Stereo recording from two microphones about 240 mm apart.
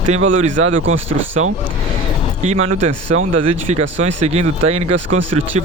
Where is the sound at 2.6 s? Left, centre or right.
Right.